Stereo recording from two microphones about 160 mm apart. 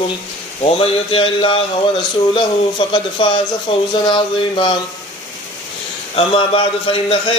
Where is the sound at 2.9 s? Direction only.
30° left (ahead or behind).